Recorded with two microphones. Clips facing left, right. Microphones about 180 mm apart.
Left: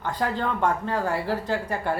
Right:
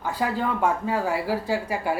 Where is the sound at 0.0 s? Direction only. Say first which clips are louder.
Right 1 dB; 5° right (ahead or behind).